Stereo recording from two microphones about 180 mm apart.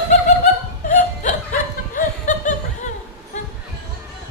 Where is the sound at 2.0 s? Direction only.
45° left (ahead or behind).